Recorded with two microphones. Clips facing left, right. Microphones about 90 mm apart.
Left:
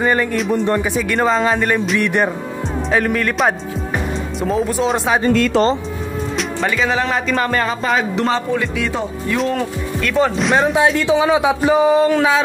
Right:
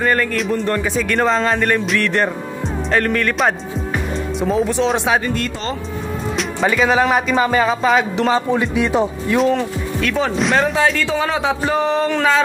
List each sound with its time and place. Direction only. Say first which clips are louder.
0.0 s speech: left 1 dB; 10° left (ahead or behind)
6.3 s music: right 2 dB; centre (ahead or behind)
6.9 s speech: right 3 dB; 10° right (ahead or behind)
8.5 s speech: right 4 dB; 20° right (ahead or behind)
9.4 s speech: right 4 dB; centre (ahead or behind)